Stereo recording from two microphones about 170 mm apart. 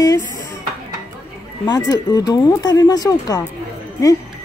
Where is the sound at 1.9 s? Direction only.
25° left (ahead or behind).